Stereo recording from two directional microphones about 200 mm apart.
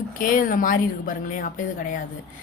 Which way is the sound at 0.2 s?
45° left (ahead or behind).